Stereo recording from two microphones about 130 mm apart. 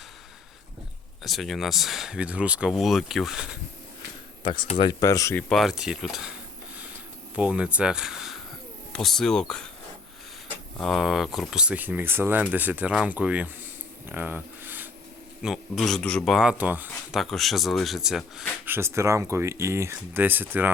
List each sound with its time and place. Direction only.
1.2 s speech: centre (ahead or behind)
4.8 s speech: 30° left (ahead or behind)
5.4 s speech: centre (ahead or behind)
7.3 s speech: 10° right (ahead or behind)
10.8 s speech: centre (ahead or behind)
14.1 s a sound: 15° right (ahead or behind)
15.4 s a man's voice: centre (ahead or behind)
17.2 s speech: centre (ahead or behind)
18.6 s speech: 20° right (ahead or behind)